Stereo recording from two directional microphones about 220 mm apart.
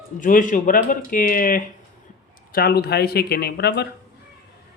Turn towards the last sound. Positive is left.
turn(degrees=50)  # may be behind; listen again after turning